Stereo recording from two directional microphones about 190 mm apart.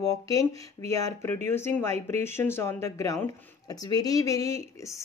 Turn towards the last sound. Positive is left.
turn(degrees=15)  # may be behind; listen again after turning